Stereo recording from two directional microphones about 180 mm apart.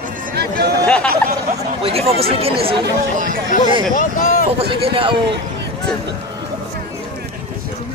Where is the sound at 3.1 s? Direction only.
50° right (ahead or behind).